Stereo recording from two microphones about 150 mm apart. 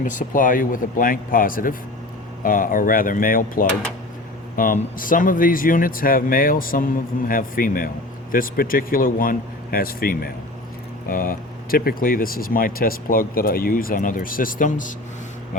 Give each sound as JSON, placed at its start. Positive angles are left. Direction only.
{"t": 0.0, "sound": "speech", "side_deg": 55}
{"t": 11.1, "sound": "speech", "side_deg": 70}